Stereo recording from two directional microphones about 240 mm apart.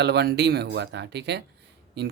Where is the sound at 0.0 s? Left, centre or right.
Right.